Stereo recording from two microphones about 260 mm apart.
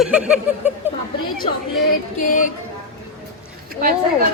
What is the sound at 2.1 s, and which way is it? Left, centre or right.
Speech, left.